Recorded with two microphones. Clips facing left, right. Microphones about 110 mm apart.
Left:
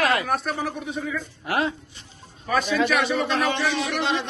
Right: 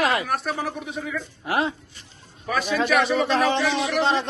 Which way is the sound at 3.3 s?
30° right (ahead or behind).